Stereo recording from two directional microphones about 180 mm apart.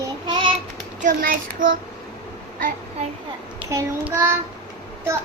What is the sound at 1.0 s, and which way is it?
Speech, 50° right (ahead or behind).